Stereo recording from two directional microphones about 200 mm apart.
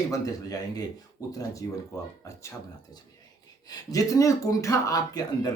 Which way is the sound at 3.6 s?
15° left (ahead or behind).